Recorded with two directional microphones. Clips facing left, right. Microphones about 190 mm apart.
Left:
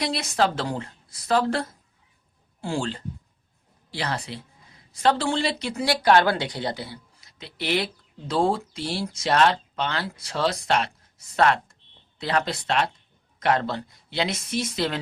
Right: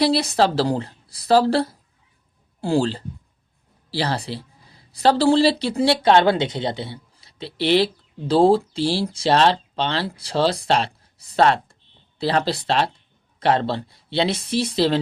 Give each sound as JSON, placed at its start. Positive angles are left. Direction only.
{"t": 0.0, "sound": "speech", "side_deg": -35}